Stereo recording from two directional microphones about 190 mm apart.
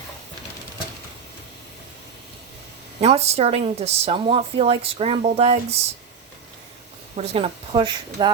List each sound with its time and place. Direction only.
3.0 s speech: 35° right (ahead or behind)
7.2 s a woman's voice: 30° right (ahead or behind)